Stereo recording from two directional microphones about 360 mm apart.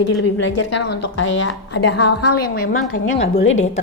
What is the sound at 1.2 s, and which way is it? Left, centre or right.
Speech, left.